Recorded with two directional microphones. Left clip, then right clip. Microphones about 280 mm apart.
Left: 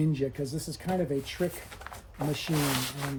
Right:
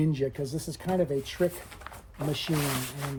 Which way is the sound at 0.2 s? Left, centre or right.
Centre.